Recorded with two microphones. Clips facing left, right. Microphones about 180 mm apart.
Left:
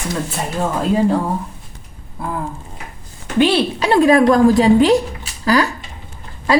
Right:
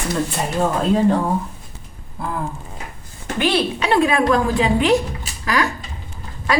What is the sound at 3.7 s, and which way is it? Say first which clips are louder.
A woman's voice: left 5 dB; 35° left (ahead or behind).